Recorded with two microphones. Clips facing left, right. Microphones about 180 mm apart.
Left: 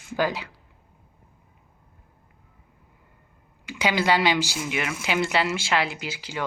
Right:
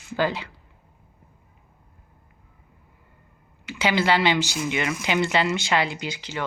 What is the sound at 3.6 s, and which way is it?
Speech, 15° left (ahead or behind).